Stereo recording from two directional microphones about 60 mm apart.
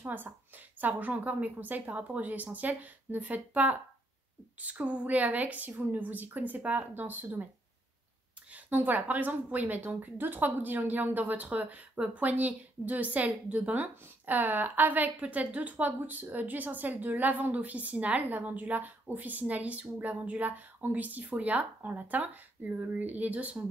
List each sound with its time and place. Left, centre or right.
0.0 s a woman's voice: right
6.9 s speech: right
8.6 s a woman's voice: right